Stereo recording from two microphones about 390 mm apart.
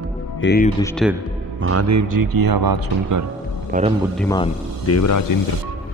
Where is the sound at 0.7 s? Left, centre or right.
Centre.